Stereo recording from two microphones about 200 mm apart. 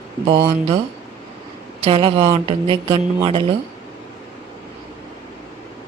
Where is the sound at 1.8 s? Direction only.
25° right (ahead or behind).